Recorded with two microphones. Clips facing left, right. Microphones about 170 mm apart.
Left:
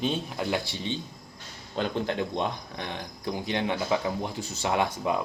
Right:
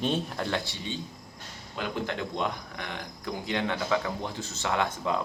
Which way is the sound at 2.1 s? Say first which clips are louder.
Left 2 dB; 20° left (ahead or behind).